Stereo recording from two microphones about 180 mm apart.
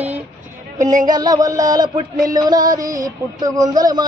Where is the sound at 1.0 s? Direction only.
20° right (ahead or behind).